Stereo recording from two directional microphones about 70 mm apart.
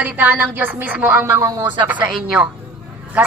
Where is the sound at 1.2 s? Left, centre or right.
Right.